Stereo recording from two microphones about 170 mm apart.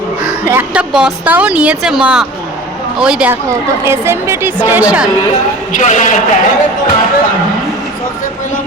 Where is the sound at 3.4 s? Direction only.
20° right (ahead or behind).